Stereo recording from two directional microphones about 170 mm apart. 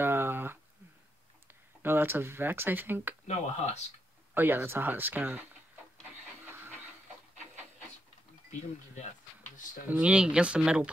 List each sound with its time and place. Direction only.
0.0 s a sound: 10° right (ahead or behind)
1.8 s speech: 10° right (ahead or behind)
3.3 s speech: 40° left (ahead or behind)
4.3 s speech: 10° right (ahead or behind)
9.8 s speech: 5° right (ahead or behind)